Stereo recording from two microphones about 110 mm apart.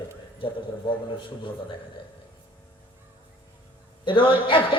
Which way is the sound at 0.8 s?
45° left (ahead or behind).